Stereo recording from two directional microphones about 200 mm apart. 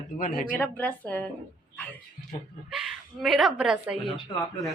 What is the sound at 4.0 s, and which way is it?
Speech, 25° left (ahead or behind).